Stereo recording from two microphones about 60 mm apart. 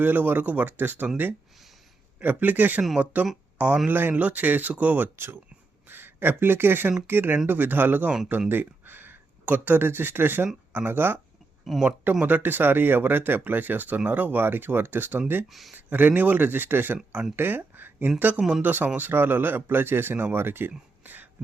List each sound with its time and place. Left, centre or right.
0.0 s speech: right
5.1 s speech: right
11.7 s speech: centre
12.2 s speech: right
18.3 s speech: centre
18.6 s speech: right